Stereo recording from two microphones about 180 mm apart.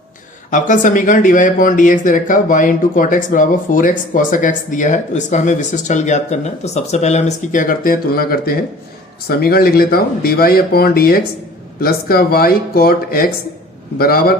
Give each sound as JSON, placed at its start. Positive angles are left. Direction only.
{"t": 0.5, "sound": "speech", "side_deg": 45}